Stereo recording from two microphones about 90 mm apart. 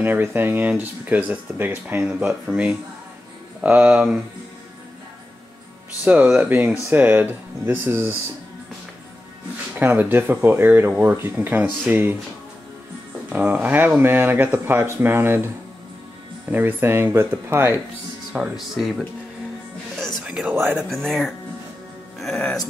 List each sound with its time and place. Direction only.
0.0 s speech: 20° right (ahead or behind)
2.4 s speech: 10° right (ahead or behind)
6.2 s speech: 5° right (ahead or behind)
6.5 s speech: 20° right (ahead or behind)
9.8 s speech: 20° right (ahead or behind)
13.3 s speech: 15° right (ahead or behind)
18.3 s speech: 5° right (ahead or behind)
20.2 s a sound: 10° right (ahead or behind)
20.5 s speech: 25° right (ahead or behind)
20.9 s speech: centre (ahead or behind)